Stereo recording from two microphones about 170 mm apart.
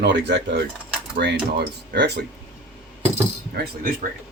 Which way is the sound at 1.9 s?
80° right.